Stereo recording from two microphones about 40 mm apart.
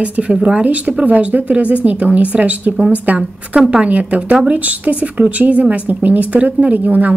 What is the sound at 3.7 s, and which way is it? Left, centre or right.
Speech, right.